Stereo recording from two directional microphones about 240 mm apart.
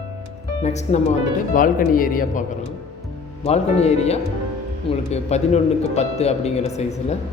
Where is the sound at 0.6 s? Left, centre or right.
Left.